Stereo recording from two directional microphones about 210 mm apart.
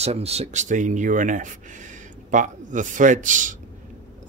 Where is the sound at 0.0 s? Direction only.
30° right (ahead or behind).